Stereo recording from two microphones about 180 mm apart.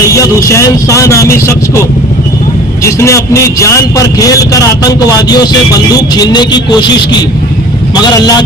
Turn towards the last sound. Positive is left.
turn(degrees=25)  # may be behind; listen again after turning